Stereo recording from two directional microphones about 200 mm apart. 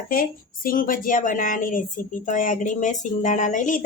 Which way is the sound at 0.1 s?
45° left (ahead or behind).